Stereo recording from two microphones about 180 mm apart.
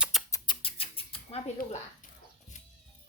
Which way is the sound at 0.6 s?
30° left (ahead or behind).